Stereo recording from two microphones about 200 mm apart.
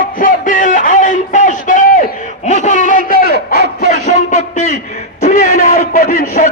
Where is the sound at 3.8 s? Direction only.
60° right (ahead or behind).